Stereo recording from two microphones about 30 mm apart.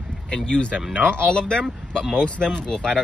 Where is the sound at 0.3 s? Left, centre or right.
Left.